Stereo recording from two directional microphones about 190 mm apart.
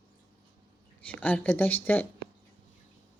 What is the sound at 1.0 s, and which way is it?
A woman's voice, 10° left (ahead or behind).